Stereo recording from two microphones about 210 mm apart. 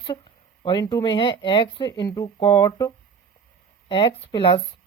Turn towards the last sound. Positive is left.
turn(degrees=20)  # may be behind; listen again after turning